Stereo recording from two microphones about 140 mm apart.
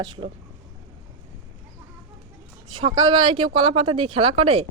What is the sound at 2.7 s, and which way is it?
Speech, 30° right (ahead or behind).